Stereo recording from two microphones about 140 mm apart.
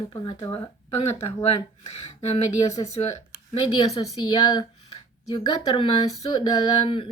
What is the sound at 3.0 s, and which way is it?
A woman's voice, 40° left (ahead or behind).